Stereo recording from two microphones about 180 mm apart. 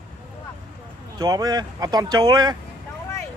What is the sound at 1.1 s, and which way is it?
Speech, 20° right (ahead or behind).